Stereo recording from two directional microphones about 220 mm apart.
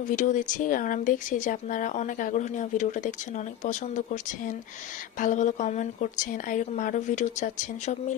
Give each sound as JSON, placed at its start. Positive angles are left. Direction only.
{"t": 0.1, "sound": "speech", "side_deg": 35}
{"t": 5.2, "sound": "speech", "side_deg": 35}